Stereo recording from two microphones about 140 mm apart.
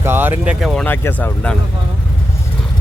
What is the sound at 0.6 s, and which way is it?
Speech, centre (ahead or behind).